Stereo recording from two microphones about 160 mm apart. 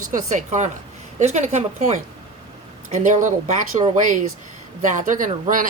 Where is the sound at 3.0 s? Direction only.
50° right (ahead or behind).